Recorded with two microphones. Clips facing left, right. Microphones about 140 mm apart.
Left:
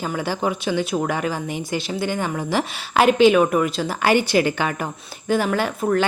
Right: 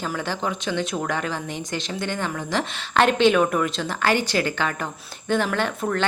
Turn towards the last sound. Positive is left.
turn(degrees=5)  # may be behind; listen again after turning